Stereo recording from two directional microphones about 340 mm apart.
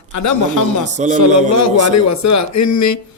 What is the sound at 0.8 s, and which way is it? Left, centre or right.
Speech, right.